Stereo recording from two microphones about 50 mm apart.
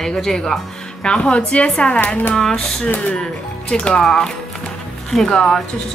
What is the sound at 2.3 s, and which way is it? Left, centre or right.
A woman's voice, centre.